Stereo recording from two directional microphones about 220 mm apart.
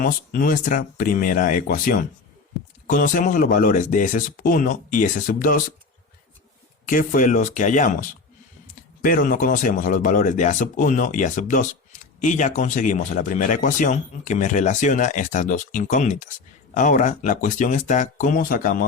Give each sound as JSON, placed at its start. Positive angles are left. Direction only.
{"t": 0.0, "sound": "speech", "side_deg": 40}
{"t": 6.8, "sound": "speech", "side_deg": 40}